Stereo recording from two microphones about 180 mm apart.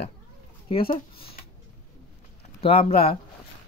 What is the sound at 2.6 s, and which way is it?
Speech, 30° left (ahead or behind).